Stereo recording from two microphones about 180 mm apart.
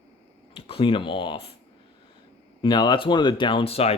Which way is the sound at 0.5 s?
30° left (ahead or behind).